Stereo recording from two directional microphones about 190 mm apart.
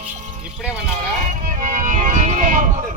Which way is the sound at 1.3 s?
45° right (ahead or behind).